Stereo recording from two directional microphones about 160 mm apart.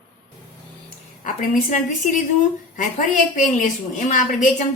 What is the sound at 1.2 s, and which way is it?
A woman's voice, 55° left (ahead or behind).